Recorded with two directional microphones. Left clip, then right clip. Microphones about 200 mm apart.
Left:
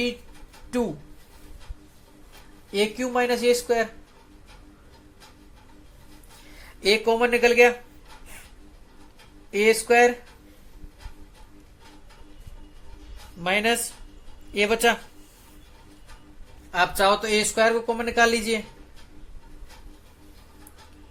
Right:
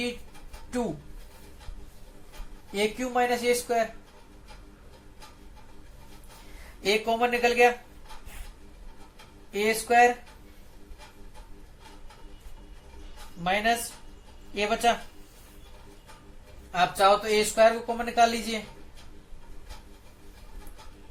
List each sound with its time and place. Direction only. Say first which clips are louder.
2.7 s speech: left 3 dB; 50° left (ahead or behind)
6.8 s speech: left 4 dB; 50° left (ahead or behind)
9.5 s speech: left 5 dB; 50° left (ahead or behind)
13.4 s speech: left 3 dB; 50° left (ahead or behind)
16.7 s speech: left 1 dB; 50° left (ahead or behind)